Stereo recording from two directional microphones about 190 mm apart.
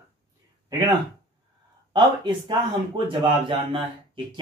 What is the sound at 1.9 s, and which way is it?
Speech, 25° right (ahead or behind).